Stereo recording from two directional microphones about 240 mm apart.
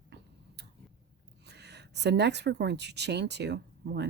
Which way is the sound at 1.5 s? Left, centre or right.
Right.